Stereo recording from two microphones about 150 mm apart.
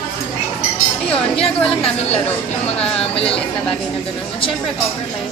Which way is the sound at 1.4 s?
40° left (ahead or behind).